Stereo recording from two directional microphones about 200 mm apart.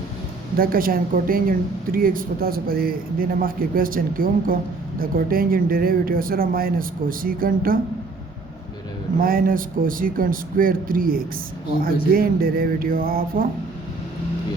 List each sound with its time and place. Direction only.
0.5 s a woman's voice: 45° right (ahead or behind)
9.2 s a woman's voice: 45° right (ahead or behind)